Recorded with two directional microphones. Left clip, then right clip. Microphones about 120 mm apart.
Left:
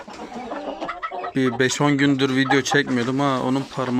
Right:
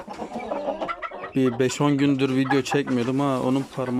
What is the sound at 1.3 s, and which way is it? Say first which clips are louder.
Speech: left 2 dB; 15° right (ahead or behind).